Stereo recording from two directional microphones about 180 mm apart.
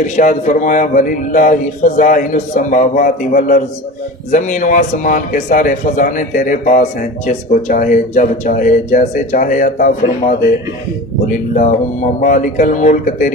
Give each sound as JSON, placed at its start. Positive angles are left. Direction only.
{"t": 0.0, "sound": "a man's voice", "side_deg": 45}